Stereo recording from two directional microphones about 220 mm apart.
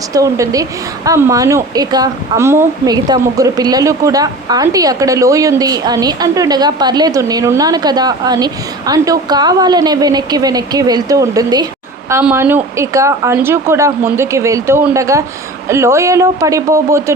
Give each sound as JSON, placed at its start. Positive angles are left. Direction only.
{"t": 0.1, "sound": "a woman's voice", "side_deg": -15}